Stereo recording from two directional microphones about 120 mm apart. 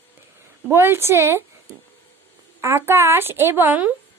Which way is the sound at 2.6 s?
20° right (ahead or behind).